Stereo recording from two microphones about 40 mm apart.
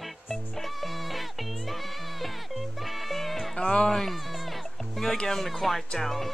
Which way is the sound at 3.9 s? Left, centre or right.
Centre.